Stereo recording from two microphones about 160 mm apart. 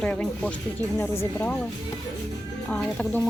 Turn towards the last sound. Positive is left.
turn(degrees=5)  # may be behind; listen again after turning